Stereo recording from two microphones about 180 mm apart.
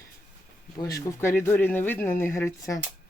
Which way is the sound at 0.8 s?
20° left (ahead or behind).